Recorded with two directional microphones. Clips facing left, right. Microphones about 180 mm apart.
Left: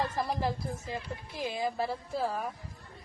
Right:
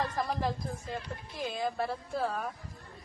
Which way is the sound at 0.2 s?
5° left (ahead or behind).